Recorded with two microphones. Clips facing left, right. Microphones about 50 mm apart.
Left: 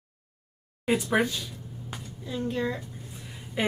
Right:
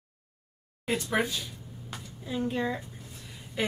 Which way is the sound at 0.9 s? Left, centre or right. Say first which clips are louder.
Left 5 dB; centre.